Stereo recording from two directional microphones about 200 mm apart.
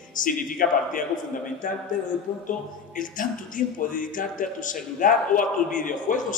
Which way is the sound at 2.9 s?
40° left (ahead or behind).